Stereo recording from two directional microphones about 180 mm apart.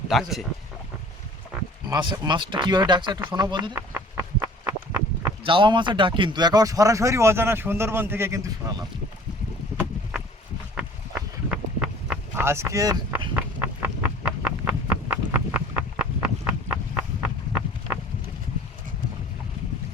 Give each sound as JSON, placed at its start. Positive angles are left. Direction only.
{"t": 0.1, "sound": "speech", "side_deg": 0}
{"t": 1.9, "sound": "speech", "side_deg": -25}
{"t": 3.6, "sound": "a sound", "side_deg": -15}
{"t": 5.4, "sound": "speech", "side_deg": -25}
{"t": 11.5, "sound": "vehicle", "side_deg": -5}
{"t": 13.3, "sound": "a sound", "side_deg": -10}